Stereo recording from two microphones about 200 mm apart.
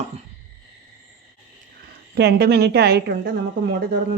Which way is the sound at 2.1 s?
55° right (ahead or behind).